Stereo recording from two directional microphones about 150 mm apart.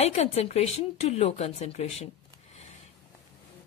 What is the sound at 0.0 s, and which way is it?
A woman's voice, 45° left (ahead or behind).